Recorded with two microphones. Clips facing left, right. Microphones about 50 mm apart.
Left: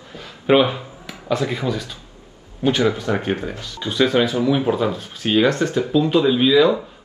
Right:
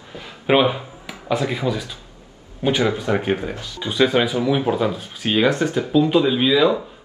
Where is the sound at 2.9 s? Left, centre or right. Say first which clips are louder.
Right 1 dB; centre.